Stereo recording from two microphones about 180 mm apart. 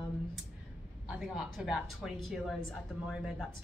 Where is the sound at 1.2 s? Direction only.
Centre (ahead or behind).